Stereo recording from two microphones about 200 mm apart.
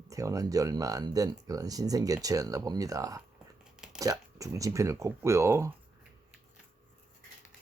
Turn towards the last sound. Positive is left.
turn(degrees=-15)  # may be behind; listen again after turning